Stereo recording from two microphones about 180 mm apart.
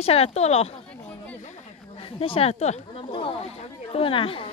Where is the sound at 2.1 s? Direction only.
30° left (ahead or behind).